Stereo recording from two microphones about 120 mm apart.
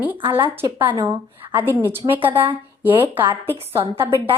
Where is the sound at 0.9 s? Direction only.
40° right (ahead or behind).